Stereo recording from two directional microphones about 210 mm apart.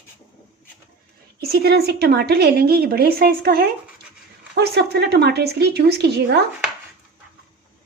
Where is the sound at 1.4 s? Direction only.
50° right (ahead or behind).